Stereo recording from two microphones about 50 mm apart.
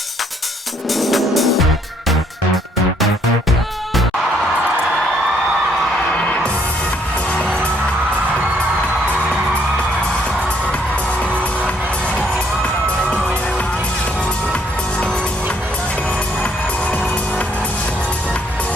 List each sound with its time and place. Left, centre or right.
0.9 s music: centre
6.1 s music: left